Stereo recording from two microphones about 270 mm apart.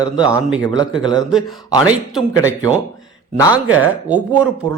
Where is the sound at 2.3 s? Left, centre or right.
Centre.